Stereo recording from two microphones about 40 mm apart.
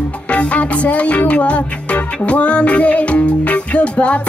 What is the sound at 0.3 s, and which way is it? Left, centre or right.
Music, left.